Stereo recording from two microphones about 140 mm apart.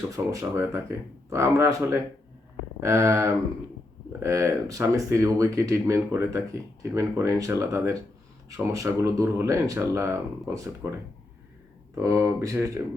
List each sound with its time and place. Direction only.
0.1 s speech: 25° right (ahead or behind)
11.9 s speech: 20° right (ahead or behind)